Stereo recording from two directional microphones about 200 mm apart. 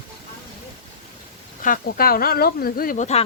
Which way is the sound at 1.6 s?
45° left (ahead or behind).